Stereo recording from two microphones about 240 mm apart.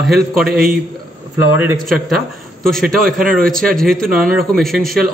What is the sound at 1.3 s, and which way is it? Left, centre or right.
A man's voice, centre.